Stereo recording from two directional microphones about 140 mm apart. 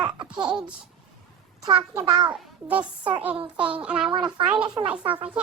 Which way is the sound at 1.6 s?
35° right (ahead or behind).